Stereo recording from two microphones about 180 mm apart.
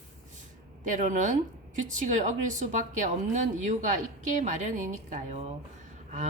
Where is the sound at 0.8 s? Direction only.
45° right (ahead or behind).